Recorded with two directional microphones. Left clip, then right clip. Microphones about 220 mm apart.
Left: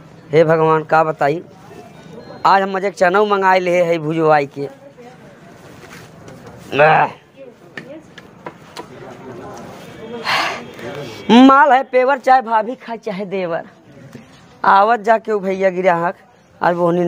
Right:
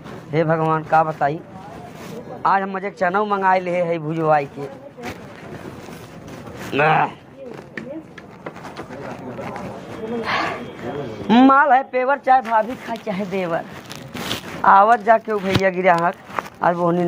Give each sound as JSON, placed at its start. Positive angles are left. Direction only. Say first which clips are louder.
{"t": 0.3, "sound": "speech", "louder": "left 7 dB", "side_deg": 55}
{"t": 2.4, "sound": "speech", "louder": "left 6 dB", "side_deg": 55}
{"t": 6.7, "sound": "speech", "louder": "left 5 dB", "side_deg": 45}
{"t": 10.2, "sound": "a sound", "louder": "left 5 dB", "side_deg": 60}
{"t": 11.1, "sound": "speech", "louder": "left 4 dB", "side_deg": 55}